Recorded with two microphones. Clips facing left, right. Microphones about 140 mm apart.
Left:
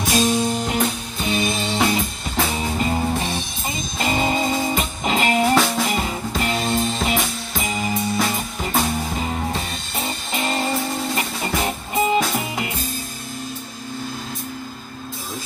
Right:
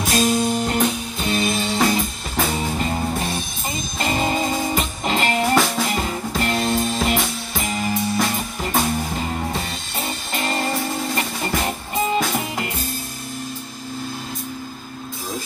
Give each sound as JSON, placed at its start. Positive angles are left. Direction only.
{"t": 0.0, "sound": "music", "side_deg": 0}
{"t": 10.3, "sound": "music", "side_deg": 0}